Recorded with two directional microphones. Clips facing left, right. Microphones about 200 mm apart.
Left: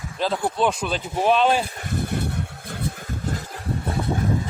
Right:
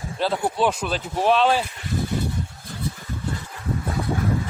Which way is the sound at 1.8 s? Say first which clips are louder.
Right 1 dB; 55° left (ahead or behind).